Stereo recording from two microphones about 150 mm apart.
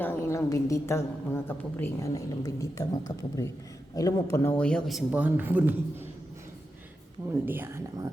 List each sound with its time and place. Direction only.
0.0 s a woman's voice: 20° left (ahead or behind); by 5.7 s 10° right (ahead or behind)
7.4 s speech: 15° right (ahead or behind)